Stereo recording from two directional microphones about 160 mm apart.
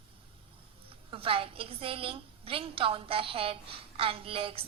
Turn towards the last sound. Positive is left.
turn(degrees=-35)  # may be behind; listen again after turning